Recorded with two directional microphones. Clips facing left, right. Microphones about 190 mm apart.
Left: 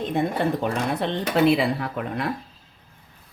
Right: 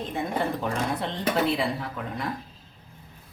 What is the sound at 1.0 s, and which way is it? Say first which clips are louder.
Speech: left 7 dB; 70° left (ahead or behind).